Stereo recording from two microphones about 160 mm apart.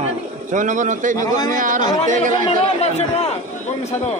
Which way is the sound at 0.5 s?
50° right (ahead or behind).